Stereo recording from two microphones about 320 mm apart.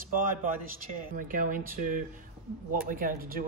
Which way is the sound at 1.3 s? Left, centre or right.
Right.